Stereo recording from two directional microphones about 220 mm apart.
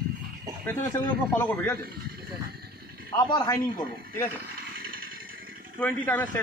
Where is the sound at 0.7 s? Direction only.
10° left (ahead or behind).